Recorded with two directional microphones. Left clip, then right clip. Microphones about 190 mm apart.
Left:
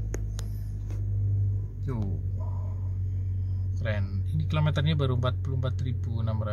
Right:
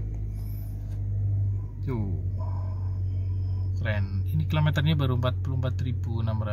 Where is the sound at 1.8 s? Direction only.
Centre (ahead or behind).